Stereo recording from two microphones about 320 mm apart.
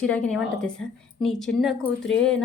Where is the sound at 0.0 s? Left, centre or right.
Centre.